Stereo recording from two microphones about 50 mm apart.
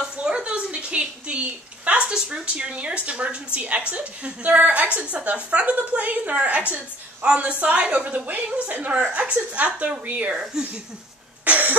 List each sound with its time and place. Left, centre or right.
0.0 s a sound: centre
2.0 s a woman's voice: centre
10.3 s speech: centre
11.4 s cough: right